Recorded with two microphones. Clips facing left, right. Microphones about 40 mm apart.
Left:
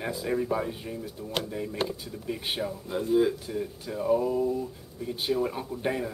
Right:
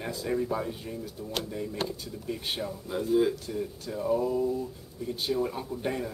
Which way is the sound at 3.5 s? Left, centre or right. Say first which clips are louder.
Left 1 dB; centre.